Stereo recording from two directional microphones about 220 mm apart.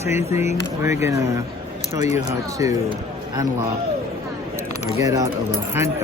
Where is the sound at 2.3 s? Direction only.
15° right (ahead or behind).